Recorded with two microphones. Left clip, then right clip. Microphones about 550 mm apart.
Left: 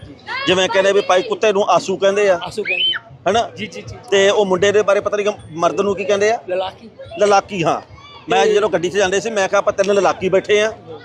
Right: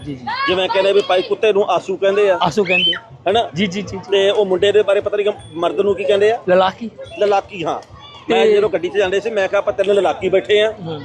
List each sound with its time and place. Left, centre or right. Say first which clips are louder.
0.4 s a man's voice: left 1 dB; left
2.4 s speech: right 6 dB; right
3.2 s a man's voice: right 1 dB; left
3.6 s speech: right 7 dB; right
4.1 s a man's voice: left 1 dB; left
6.5 s speech: right 8 dB; right
7.2 s a man's voice: left 2 dB; left